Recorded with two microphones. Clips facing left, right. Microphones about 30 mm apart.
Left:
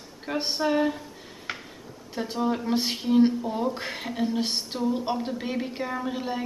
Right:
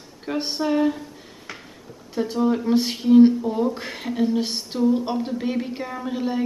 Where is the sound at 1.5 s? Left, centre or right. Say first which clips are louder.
Left 3 dB; left.